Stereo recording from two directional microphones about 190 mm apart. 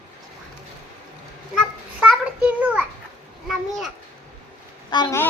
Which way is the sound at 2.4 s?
5° right (ahead or behind).